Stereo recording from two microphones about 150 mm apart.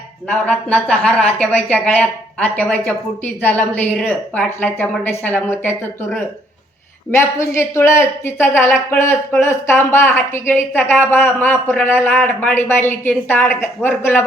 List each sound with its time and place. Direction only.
0.3 s speech: 5° left (ahead or behind)
7.1 s speech: 15° left (ahead or behind)